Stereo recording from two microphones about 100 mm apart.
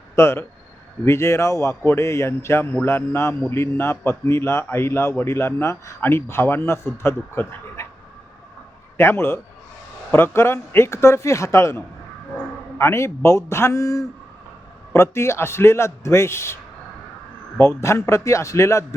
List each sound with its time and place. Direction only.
0.2 s speech: 25° left (ahead or behind)
9.0 s speech: 25° left (ahead or behind)
12.8 s speech: 30° left (ahead or behind)
17.6 s speech: 30° left (ahead or behind)